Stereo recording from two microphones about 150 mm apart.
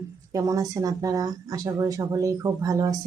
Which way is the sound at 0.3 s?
25° right (ahead or behind).